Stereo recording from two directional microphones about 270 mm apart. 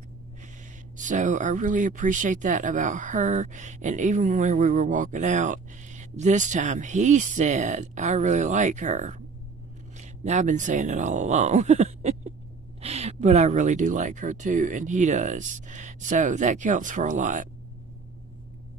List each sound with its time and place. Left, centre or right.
0.9 s speech: right